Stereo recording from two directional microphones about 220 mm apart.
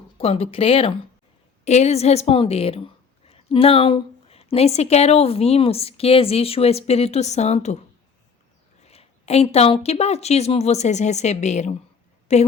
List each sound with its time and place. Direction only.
0.2 s a woman's voice: 25° left (ahead or behind)
8.8 s a woman's voice: 30° left (ahead or behind)